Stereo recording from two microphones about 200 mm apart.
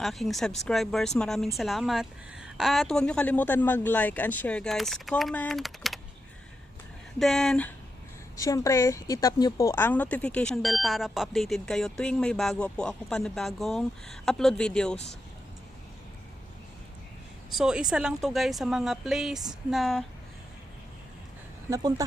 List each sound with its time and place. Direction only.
0.0 s speech: centre (ahead or behind)
7.2 s speech: centre (ahead or behind)
8.4 s speech: 15° left (ahead or behind)
17.5 s speech: 5° right (ahead or behind)
21.7 s a woman's voice: 15° right (ahead or behind)